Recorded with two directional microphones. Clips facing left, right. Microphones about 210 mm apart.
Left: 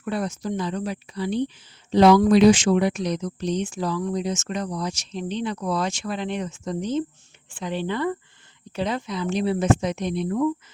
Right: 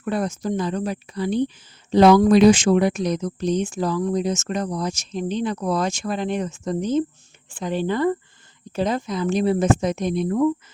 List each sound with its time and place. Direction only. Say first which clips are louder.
0.0 s speech: right 3 dB; 45° right (ahead or behind)